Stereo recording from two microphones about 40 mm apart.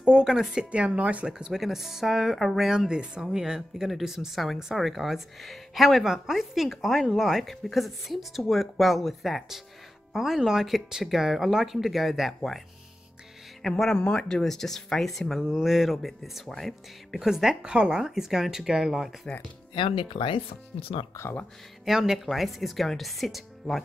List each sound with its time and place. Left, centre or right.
0.0 s speech: right
0.7 s speech: right
1.2 s speech: centre
2.9 s speech: centre
13.6 s speech: centre
15.4 s speech: centre
17.2 s speech: centre
17.6 s speech: right
18.0 s speech: centre
19.2 s speech: left
21.8 s speech: centre